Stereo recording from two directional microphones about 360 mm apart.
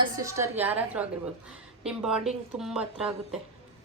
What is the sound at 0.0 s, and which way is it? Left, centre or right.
A woman's voice, centre.